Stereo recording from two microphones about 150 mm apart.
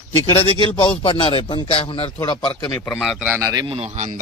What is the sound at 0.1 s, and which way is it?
Speech, 40° left (ahead or behind).